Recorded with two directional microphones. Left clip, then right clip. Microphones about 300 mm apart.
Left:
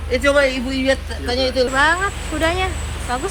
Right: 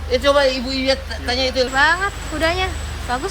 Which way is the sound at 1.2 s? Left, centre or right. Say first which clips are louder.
Left 1 dB; centre.